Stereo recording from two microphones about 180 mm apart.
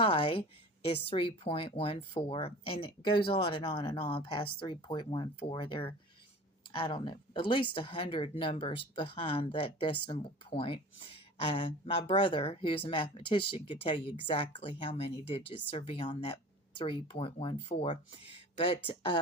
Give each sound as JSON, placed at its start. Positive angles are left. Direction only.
{"t": 0.0, "sound": "speech", "side_deg": 30}